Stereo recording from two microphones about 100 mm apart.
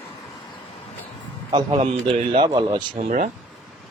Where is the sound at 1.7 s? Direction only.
90° right.